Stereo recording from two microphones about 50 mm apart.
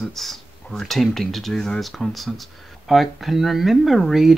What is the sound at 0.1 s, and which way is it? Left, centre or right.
Speech, centre.